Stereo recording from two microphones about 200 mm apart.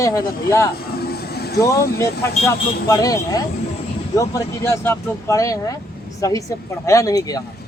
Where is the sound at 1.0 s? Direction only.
50° left (ahead or behind).